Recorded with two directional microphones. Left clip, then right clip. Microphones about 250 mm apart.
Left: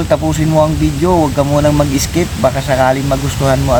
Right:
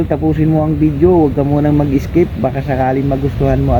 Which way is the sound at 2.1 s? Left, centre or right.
Centre.